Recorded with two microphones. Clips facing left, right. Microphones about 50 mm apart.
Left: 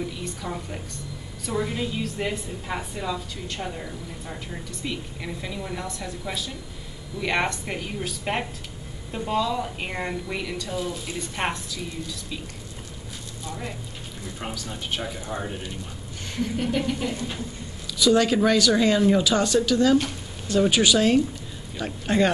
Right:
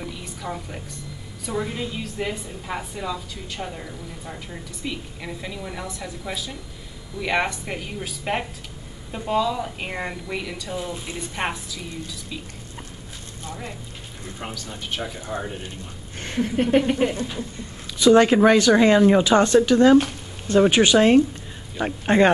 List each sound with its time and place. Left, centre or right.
0.0 s a sound: centre
1.4 s a woman's voice: centre
10.8 s speech: right
11.1 s a woman's voice: centre
14.4 s a woman's voice: centre
16.2 s speech: right